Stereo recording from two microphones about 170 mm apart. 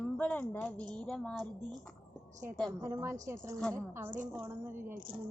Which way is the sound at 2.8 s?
15° right (ahead or behind).